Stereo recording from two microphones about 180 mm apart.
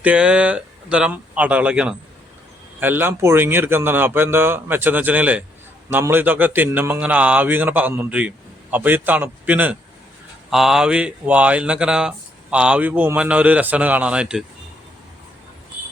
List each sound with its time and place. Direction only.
0.0 s speech: 5° right (ahead or behind)